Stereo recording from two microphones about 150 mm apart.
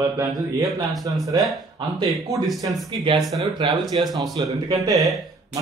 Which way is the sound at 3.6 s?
30° right (ahead or behind).